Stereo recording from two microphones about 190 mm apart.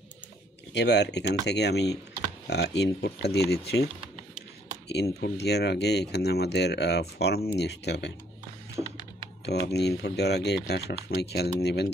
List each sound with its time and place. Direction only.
0.7 s speech: 65° left (ahead or behind)
5.2 s speech: 60° left (ahead or behind)
9.5 s speech: 60° left (ahead or behind)